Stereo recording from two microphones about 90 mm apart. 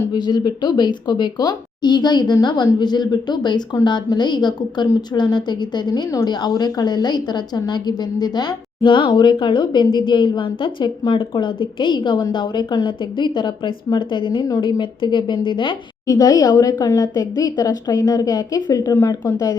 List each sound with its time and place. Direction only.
0.1 s a woman's voice: 55° left (ahead or behind)
6.2 s a woman's voice: 55° left (ahead or behind)
16.0 s speech: 45° left (ahead or behind)
18.9 s speech: 30° left (ahead or behind)